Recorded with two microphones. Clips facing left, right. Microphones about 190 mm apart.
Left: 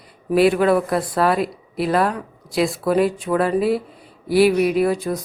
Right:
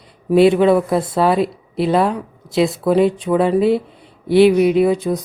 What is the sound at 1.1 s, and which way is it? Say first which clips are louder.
Speech: right 3 dB; centre (ahead or behind).